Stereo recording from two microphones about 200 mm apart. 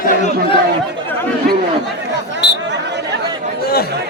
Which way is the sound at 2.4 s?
60° left (ahead or behind).